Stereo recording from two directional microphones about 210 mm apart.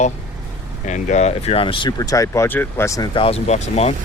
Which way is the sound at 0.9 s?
35° left (ahead or behind).